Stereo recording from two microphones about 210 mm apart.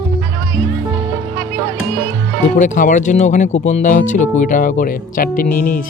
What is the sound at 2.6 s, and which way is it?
Speech, 35° left (ahead or behind).